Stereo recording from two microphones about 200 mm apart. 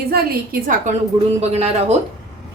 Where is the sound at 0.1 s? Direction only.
50° right (ahead or behind).